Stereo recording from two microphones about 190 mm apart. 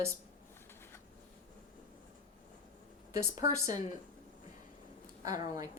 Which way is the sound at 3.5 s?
15° right (ahead or behind).